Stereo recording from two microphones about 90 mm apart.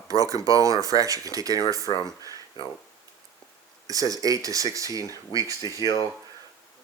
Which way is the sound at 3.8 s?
40° right (ahead or behind).